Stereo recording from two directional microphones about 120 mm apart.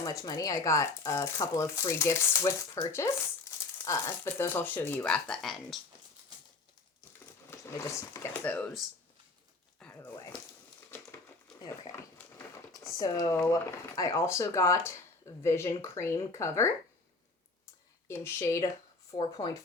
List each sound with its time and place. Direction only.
0.0 s speech: 30° left (ahead or behind); by 5.8 s centre (ahead or behind)
7.5 s speech: 25° left (ahead or behind)
8.3 s speech: 10° left (ahead or behind)
9.8 s crumpling: 15° left (ahead or behind)
11.9 s a sound: 25° left (ahead or behind)
13.0 s speech: 30° left (ahead or behind)
18.1 s speech: 20° left (ahead or behind)
19.1 s speech: 40° left (ahead or behind)